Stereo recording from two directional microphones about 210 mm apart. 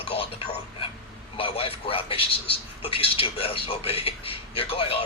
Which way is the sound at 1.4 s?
25° left (ahead or behind).